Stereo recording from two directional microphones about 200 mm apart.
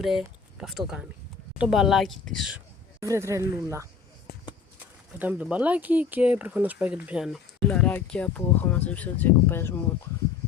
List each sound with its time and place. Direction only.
0.0 s speech: centre (ahead or behind)
3.0 s speech: 15° right (ahead or behind)
4.3 s basketball bounce: 50° left (ahead or behind)
5.2 s speech: 10° right (ahead or behind)
7.7 s speech: 5° left (ahead or behind)